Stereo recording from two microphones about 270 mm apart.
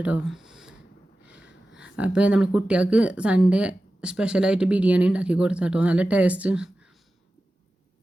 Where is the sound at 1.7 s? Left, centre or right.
Centre.